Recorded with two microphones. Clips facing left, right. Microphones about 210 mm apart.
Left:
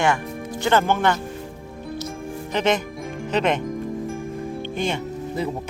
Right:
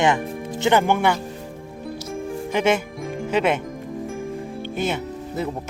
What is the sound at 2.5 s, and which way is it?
Music, 10° right (ahead or behind).